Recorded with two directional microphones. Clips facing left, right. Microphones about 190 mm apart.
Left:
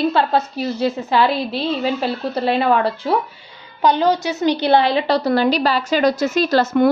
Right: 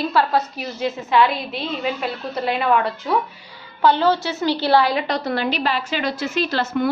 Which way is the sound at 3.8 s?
15° left (ahead or behind).